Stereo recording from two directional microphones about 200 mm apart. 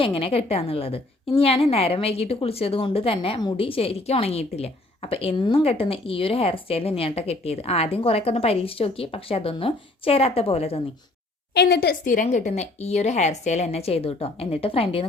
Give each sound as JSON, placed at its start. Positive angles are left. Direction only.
{"t": 0.0, "sound": "a woman's voice", "side_deg": 30}
{"t": 11.5, "sound": "speech", "side_deg": 55}